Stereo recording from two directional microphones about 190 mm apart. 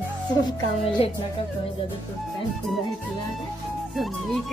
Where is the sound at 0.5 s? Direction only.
25° left (ahead or behind).